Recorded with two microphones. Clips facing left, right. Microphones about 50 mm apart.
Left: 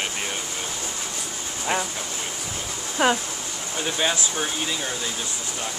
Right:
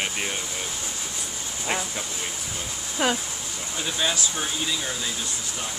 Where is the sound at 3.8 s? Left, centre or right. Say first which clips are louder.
Left 2 dB; left.